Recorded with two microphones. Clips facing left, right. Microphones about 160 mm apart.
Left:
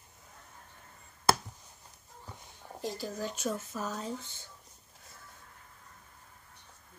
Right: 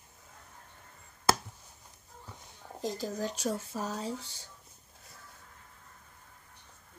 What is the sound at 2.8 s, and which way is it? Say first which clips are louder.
Speech: right 2 dB; 45° right (ahead or behind).